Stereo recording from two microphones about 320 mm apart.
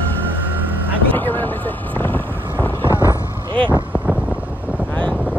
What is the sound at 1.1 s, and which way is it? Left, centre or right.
Speech, centre.